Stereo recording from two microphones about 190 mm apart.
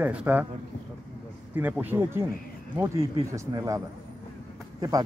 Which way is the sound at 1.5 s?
10° right (ahead or behind).